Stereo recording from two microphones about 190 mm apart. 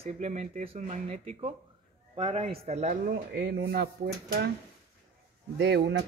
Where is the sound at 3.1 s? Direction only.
50° right (ahead or behind).